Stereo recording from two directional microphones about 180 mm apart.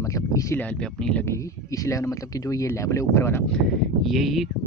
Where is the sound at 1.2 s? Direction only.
15° left (ahead or behind).